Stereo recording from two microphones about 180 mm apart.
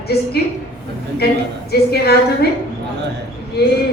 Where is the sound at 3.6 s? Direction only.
65° left (ahead or behind).